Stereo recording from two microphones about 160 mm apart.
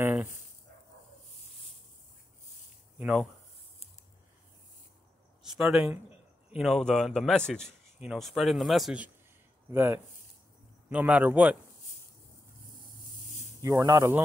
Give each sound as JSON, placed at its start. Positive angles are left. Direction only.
{"t": 0.0, "sound": "dog", "side_deg": -15}
{"t": 3.0, "sound": "speech", "side_deg": -5}
{"t": 5.4, "sound": "speech", "side_deg": -5}
{"t": 9.7, "sound": "a man's voice", "side_deg": -15}
{"t": 13.6, "sound": "speech", "side_deg": -20}